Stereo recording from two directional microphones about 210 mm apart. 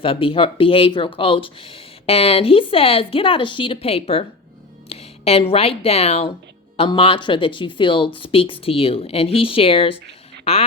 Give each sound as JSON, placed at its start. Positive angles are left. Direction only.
{"t": 0.0, "sound": "speech", "side_deg": 25}